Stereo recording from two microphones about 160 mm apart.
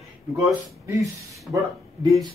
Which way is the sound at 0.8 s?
20° right (ahead or behind).